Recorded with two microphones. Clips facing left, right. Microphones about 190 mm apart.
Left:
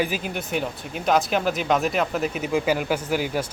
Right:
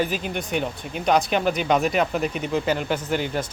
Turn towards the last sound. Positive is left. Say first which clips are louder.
# even
turn(degrees=5)  # may be behind; listen again after turning